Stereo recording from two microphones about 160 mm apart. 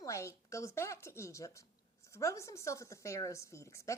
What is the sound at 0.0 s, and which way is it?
A woman's voice, 20° left (ahead or behind).